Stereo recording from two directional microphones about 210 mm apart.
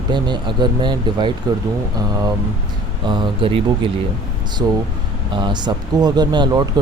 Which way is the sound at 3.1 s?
25° right (ahead or behind).